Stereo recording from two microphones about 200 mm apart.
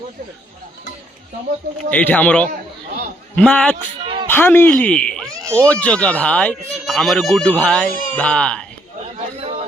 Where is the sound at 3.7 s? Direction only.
25° right (ahead or behind).